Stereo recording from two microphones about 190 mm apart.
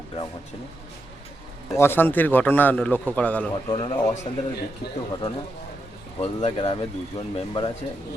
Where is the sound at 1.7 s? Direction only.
10° left (ahead or behind).